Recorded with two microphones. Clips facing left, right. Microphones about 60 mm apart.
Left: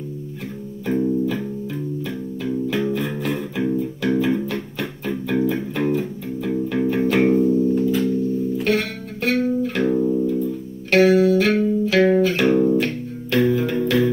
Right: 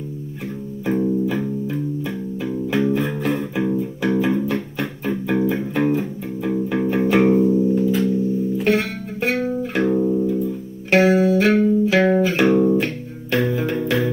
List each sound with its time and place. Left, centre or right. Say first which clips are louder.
0.8 s music: even; centre